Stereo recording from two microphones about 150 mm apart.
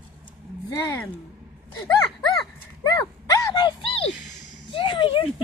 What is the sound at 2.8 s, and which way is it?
Dog, 25° left (ahead or behind).